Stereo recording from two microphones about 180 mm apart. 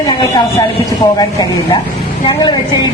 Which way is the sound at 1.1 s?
20° left (ahead or behind).